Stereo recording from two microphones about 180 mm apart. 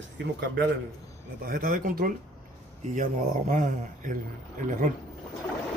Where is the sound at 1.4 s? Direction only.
50° right (ahead or behind).